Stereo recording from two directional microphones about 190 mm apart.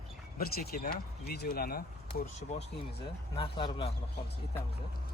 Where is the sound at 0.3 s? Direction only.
55° left (ahead or behind).